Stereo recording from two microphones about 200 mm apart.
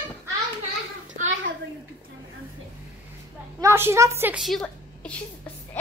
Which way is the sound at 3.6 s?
10° right (ahead or behind).